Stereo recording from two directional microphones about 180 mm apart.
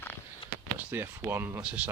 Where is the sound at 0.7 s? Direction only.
10° right (ahead or behind).